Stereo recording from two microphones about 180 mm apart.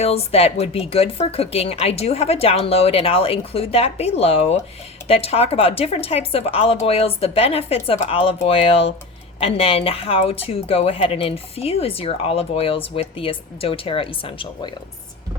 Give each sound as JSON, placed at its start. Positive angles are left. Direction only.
{"t": 0.0, "sound": "speech", "side_deg": 35}